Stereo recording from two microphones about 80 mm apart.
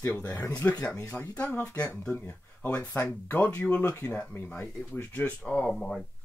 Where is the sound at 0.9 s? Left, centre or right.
Left.